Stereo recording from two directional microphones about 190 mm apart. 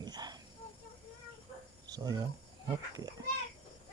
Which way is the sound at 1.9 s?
20° right (ahead or behind).